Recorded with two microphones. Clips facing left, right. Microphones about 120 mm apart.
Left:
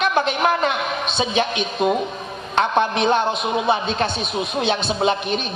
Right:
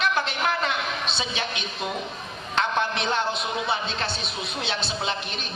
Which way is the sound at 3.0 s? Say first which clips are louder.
Left 8 dB; 55° left (ahead or behind).